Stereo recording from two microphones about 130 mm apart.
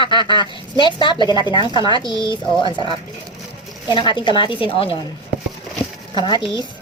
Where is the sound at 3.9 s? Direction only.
35° left (ahead or behind).